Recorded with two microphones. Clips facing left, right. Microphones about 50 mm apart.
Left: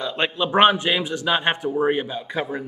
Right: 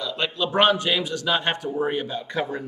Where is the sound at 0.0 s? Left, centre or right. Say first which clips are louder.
Left 3 dB; left.